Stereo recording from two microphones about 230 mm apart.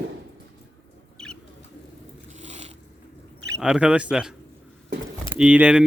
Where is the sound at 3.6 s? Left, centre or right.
Centre.